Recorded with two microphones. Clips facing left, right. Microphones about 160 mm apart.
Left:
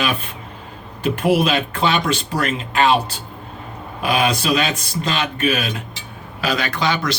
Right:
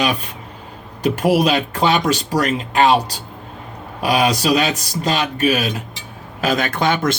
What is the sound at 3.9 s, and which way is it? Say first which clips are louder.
A man's voice: right 2 dB; 40° right (ahead or behind).